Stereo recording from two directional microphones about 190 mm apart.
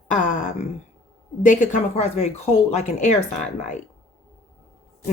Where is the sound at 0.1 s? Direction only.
40° left (ahead or behind).